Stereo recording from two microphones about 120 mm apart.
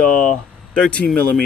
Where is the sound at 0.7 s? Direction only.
10° left (ahead or behind).